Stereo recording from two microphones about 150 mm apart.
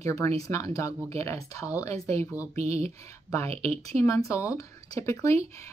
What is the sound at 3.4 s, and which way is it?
Speech, 45° right (ahead or behind).